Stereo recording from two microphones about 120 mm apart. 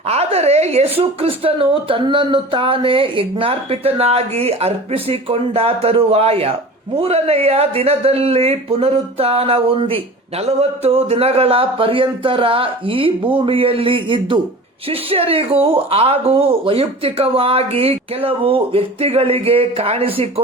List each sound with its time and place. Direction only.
0.1 s speech: 60° right (ahead or behind)